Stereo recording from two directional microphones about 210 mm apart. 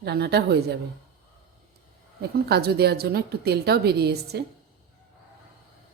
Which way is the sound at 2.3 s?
50° right (ahead or behind).